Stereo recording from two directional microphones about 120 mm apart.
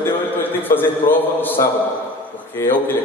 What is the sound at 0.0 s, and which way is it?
A man's voice, 15° left (ahead or behind).